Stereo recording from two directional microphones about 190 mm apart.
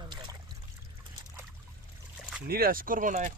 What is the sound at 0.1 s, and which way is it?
Trickle, 25° right (ahead or behind).